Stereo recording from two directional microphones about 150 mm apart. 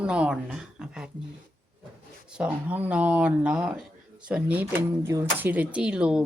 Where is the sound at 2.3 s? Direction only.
10° right (ahead or behind).